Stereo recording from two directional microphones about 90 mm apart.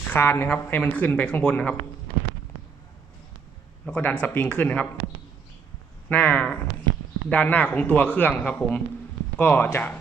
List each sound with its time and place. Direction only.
0.1 s speech: 20° left (ahead or behind)
3.8 s speech: 10° left (ahead or behind)
6.1 s speech: 15° left (ahead or behind)